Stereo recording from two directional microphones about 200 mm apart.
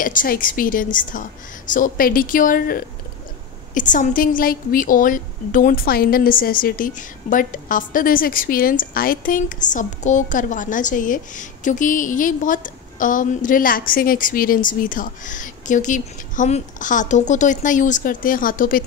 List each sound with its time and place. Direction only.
0.0 s a woman's voice: 45° left (ahead or behind)